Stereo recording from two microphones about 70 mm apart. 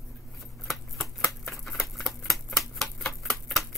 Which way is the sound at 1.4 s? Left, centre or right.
Centre.